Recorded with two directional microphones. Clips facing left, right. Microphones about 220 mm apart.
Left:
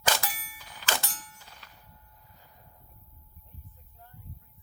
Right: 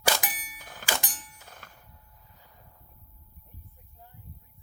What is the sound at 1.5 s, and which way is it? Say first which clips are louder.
Clang: right 4 dB; 50° right (ahead or behind).